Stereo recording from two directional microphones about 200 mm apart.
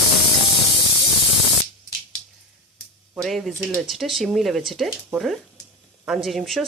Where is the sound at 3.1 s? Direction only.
Centre (ahead or behind).